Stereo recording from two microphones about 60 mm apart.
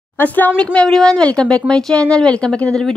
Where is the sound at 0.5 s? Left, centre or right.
Centre.